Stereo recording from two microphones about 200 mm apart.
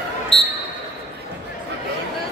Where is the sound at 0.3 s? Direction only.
30° left (ahead or behind).